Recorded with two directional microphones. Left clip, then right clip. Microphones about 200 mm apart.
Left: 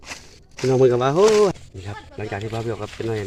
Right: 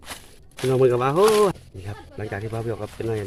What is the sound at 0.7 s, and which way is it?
Speech, 20° left (ahead or behind).